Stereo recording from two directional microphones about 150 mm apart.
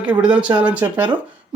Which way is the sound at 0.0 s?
10° right (ahead or behind).